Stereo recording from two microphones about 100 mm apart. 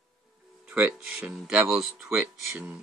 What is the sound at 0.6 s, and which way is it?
Speech, 10° right (ahead or behind).